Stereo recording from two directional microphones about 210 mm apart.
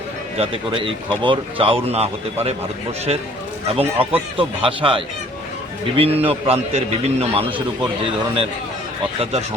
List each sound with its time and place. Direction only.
0.3 s speech: 25° right (ahead or behind)